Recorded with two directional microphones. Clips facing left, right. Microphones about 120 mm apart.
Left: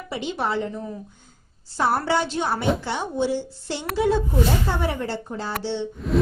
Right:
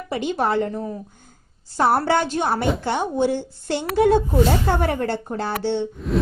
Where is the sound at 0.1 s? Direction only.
50° right (ahead or behind).